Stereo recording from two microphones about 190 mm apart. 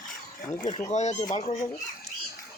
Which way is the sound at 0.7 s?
35° left (ahead or behind).